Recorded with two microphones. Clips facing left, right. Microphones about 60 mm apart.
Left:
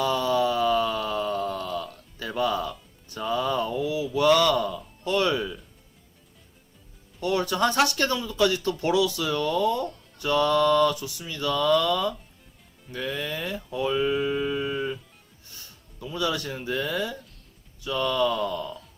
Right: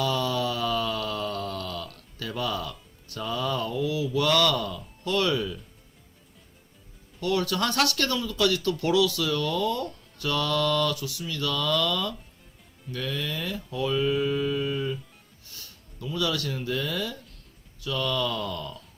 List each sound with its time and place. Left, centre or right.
0.0 s a sound: centre
3.1 s speech: centre
7.2 s speech: left